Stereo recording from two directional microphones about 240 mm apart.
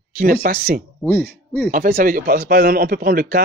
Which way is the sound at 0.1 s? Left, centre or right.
Right.